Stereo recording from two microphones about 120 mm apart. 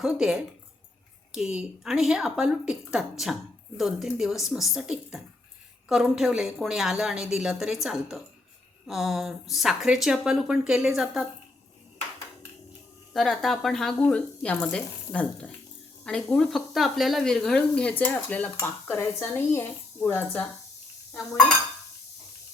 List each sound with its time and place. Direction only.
0.0 s speech: 5° right (ahead or behind)
13.1 s speech: centre (ahead or behind); by 20.4 s 20° left (ahead or behind)